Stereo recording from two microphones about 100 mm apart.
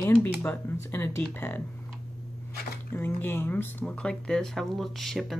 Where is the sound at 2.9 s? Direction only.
20° left (ahead or behind); by 5.3 s centre (ahead or behind).